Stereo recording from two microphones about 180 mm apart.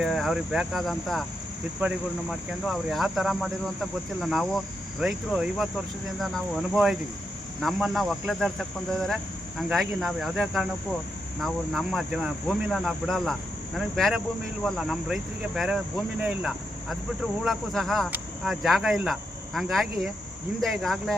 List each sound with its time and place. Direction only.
0.0 s speech: centre (ahead or behind)
2.6 s speech: centre (ahead or behind)